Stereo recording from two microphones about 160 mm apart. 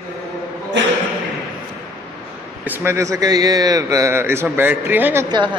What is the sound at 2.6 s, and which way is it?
A man's voice, 15° right (ahead or behind).